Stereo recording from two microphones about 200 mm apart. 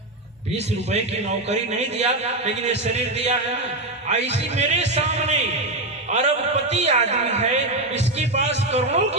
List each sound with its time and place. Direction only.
0.5 s a man's voice: 30° right (ahead or behind)